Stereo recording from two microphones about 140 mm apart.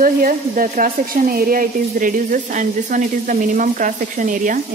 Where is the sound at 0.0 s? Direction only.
75° right (ahead or behind).